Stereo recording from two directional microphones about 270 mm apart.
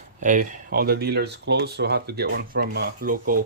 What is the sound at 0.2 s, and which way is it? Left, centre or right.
Speech, right.